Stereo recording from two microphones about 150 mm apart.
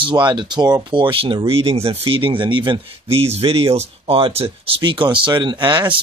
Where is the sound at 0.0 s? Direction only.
30° right (ahead or behind).